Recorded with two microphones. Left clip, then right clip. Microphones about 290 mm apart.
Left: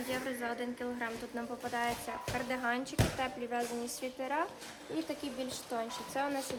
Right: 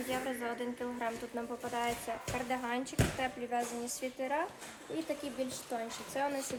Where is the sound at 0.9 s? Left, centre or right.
Centre.